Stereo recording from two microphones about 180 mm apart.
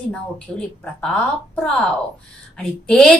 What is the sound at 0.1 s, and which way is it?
A woman's voice, 5° left (ahead or behind).